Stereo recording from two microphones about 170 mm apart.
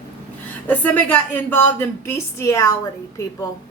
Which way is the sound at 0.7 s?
10° left (ahead or behind).